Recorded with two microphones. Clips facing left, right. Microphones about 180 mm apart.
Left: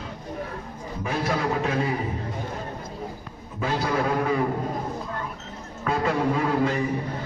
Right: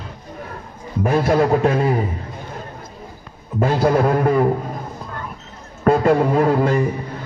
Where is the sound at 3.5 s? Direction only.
55° right (ahead or behind).